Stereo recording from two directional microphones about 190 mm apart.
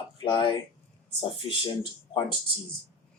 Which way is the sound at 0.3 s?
25° left (ahead or behind).